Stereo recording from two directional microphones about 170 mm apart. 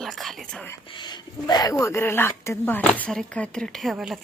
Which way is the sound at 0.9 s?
25° left (ahead or behind).